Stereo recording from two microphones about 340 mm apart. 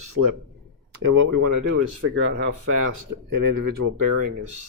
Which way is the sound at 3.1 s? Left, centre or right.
Right.